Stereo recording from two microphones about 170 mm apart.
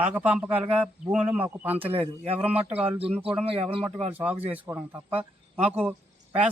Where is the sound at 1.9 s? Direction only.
35° right (ahead or behind).